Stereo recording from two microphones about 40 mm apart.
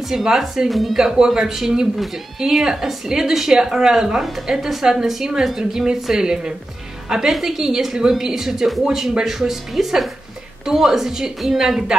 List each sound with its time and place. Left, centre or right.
0.1 s speech: centre
0.7 s a woman's voice: centre
0.9 s a woman's voice: centre